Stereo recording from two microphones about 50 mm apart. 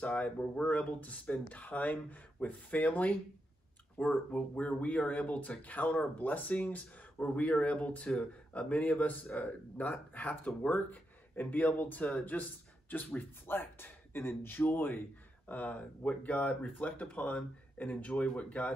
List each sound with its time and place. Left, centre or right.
0.0 s speech: left
15.4 s speech: left